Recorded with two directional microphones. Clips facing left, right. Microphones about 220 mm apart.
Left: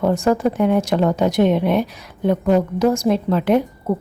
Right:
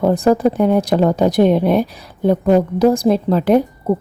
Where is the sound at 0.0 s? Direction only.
35° right (ahead or behind).